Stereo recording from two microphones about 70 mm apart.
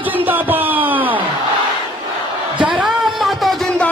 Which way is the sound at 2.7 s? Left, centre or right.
Centre.